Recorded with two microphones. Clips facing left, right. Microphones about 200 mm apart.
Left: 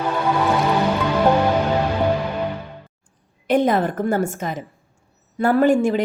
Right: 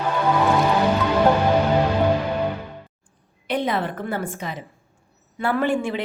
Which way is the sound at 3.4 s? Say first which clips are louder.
Left 6 dB; 45° left (ahead or behind).